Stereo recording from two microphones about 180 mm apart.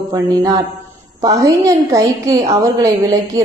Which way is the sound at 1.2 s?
20° right (ahead or behind).